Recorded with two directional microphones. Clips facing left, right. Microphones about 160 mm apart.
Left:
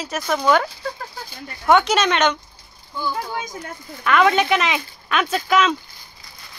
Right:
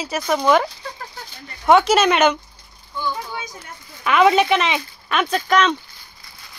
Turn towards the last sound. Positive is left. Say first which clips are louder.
# right 1 dB
turn(degrees=0)  # may be behind; listen again after turning